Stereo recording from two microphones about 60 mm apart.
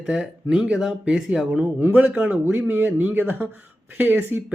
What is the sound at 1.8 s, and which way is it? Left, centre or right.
Speech, right.